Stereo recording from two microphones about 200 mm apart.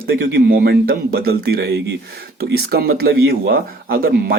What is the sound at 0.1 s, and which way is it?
Speech, 55° right (ahead or behind).